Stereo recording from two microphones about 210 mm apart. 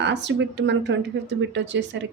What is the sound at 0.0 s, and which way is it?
A woman's voice, 55° right (ahead or behind).